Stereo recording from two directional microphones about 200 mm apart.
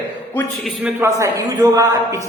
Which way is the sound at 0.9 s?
15° right (ahead or behind).